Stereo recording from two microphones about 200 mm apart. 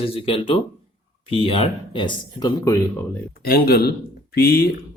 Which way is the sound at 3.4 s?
45° left (ahead or behind).